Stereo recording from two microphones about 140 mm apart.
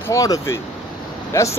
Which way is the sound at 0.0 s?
25° left (ahead or behind).